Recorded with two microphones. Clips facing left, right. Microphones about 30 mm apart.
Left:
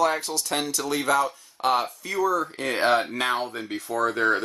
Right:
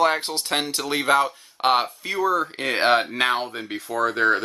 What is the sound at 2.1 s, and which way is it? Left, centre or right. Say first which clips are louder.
Speech: right 2 dB; right.